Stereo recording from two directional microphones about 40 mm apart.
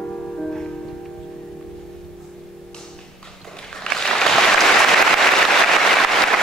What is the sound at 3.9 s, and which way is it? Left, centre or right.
Applause, centre.